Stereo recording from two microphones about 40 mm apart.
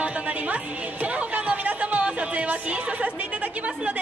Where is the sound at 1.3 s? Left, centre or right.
Right.